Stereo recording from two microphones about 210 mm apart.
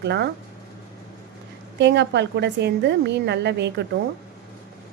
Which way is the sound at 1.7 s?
55° right (ahead or behind).